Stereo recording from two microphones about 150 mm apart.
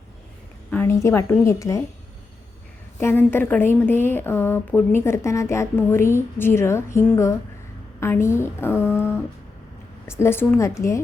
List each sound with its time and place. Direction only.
0.7 s a woman's voice: 15° left (ahead or behind)
3.0 s a woman's voice: 15° left (ahead or behind)
8.0 s a woman's voice: 15° left (ahead or behind)